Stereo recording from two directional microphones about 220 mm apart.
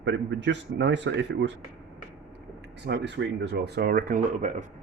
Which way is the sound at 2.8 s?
50° right (ahead or behind).